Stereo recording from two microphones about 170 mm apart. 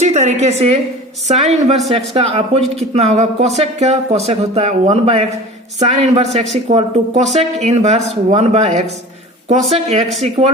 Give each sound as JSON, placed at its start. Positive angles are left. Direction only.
{"t": 0.0, "sound": "a woman's voice", "side_deg": -40}